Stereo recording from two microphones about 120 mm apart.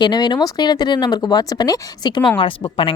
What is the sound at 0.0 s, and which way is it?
A woman's voice, 35° left (ahead or behind).